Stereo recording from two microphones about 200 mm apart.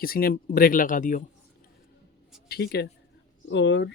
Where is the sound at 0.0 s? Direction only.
45° left (ahead or behind).